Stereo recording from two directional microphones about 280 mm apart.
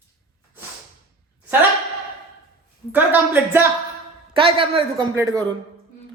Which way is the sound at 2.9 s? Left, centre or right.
Centre.